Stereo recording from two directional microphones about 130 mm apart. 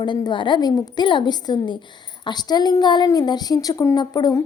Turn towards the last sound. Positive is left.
turn(degrees=30)  # may be behind; listen again after turning